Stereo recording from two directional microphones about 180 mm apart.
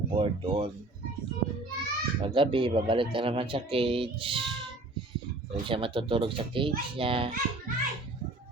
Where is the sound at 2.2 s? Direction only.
30° right (ahead or behind).